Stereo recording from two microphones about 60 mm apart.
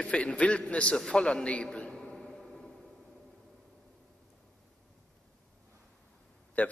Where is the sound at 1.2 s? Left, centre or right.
Centre.